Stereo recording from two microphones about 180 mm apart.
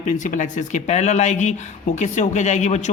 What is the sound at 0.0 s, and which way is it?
A woman's voice, 45° left (ahead or behind).